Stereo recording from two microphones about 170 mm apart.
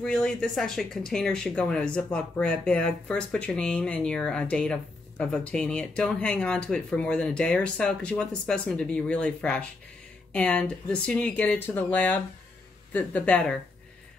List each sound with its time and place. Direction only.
0.0 s speech: 5° left (ahead or behind)